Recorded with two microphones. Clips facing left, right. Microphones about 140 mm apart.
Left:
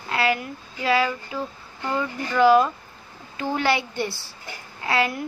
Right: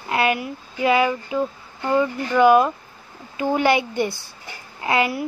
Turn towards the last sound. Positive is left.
turn(degrees=-15)  # may be behind; listen again after turning